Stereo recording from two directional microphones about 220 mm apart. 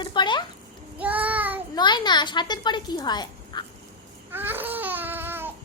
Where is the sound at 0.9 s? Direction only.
5° right (ahead or behind).